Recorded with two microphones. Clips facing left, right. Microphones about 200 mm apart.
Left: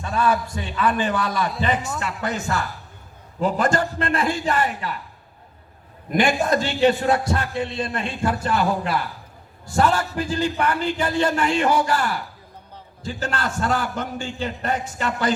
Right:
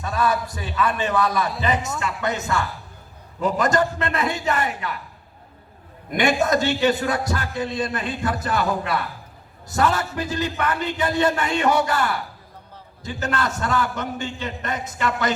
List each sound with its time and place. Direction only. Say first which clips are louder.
0.0 s a man's voice: left 1 dB; 30° left (ahead or behind)
6.1 s a man's voice: even; 30° left (ahead or behind)